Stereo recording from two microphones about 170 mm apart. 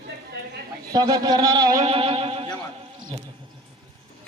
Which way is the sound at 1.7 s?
40° right (ahead or behind).